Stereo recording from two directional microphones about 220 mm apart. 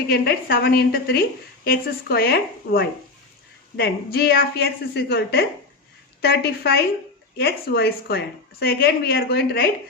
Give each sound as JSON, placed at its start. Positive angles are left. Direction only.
{"t": 0.1, "sound": "a woman's voice", "side_deg": 45}